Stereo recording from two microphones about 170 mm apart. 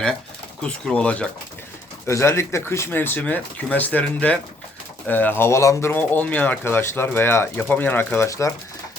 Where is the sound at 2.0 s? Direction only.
15° left (ahead or behind).